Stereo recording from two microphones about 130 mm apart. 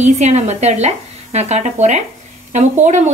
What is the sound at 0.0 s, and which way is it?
A woman's voice, 60° right (ahead or behind).